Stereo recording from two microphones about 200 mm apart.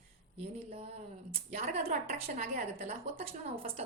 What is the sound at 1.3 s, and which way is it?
A woman's voice, 35° right (ahead or behind).